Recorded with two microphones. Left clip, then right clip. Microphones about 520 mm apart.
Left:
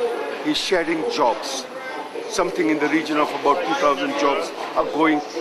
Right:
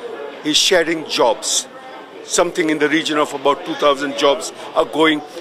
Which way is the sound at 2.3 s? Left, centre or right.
Right.